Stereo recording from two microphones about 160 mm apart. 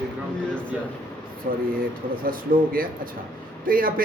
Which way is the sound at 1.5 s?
55° right (ahead or behind).